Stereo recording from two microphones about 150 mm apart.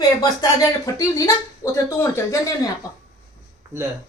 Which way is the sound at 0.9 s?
25° left (ahead or behind).